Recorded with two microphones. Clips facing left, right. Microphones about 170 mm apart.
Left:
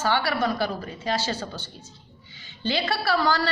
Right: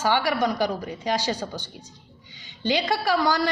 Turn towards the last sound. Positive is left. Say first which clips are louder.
# right 1 dB
turn(degrees=-15)  # may be behind; listen again after turning